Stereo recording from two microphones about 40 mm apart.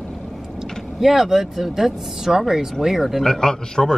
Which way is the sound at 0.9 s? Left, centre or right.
Centre.